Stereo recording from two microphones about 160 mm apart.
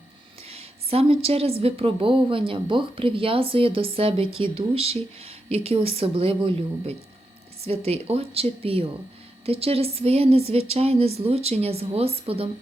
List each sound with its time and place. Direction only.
0.4 s a woman's voice: 40° right (ahead or behind)